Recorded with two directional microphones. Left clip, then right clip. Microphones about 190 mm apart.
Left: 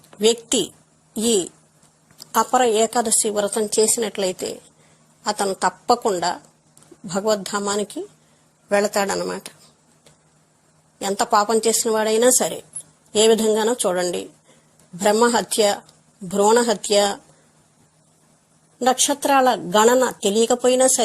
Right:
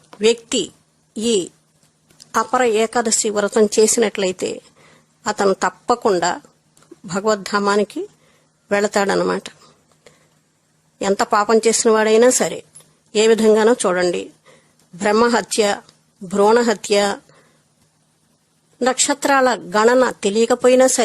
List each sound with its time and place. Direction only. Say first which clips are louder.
0.2 s a woman's voice: right 2 dB; 15° right (ahead or behind); by 9.6 s 30° right (ahead or behind)
11.0 s a woman's voice: right 2 dB; 20° right (ahead or behind)
15.1 s speech: right 3 dB; 20° right (ahead or behind)
18.8 s speech: right 1 dB; 15° right (ahead or behind)